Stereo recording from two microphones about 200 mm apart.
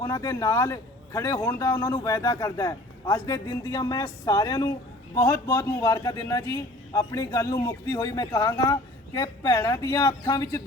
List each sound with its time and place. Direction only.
0.0 s a man's voice: 15° left (ahead or behind)